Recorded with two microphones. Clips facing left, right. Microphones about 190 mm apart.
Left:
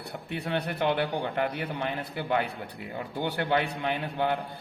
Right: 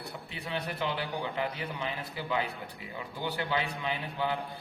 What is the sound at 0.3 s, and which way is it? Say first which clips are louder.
A man's voice: left 7 dB; 55° left (ahead or behind).